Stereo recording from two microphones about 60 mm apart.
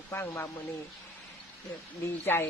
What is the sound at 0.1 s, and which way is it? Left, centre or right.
Speech, left.